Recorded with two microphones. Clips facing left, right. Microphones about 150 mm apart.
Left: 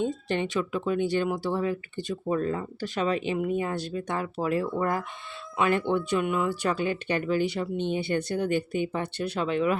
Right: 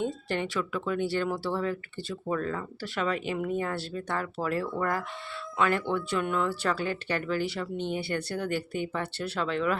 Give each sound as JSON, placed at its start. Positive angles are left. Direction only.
{"t": 0.0, "sound": "speech", "side_deg": 20}